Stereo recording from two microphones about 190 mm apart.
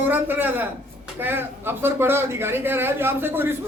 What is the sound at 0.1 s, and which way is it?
Speech, 10° right (ahead or behind).